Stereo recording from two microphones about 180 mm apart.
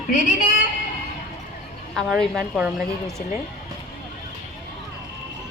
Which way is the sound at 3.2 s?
50° left (ahead or behind).